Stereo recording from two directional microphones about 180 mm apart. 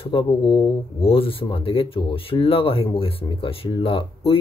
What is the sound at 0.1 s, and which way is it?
Speech, 25° left (ahead or behind).